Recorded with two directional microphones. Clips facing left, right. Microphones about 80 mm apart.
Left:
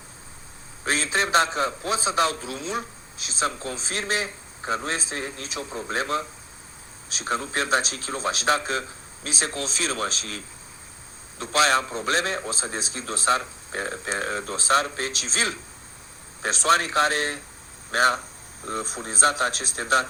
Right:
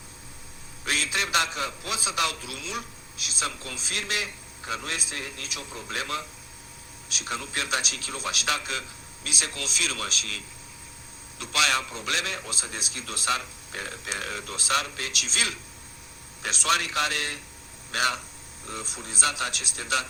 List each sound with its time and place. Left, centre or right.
0.9 s a man's voice: left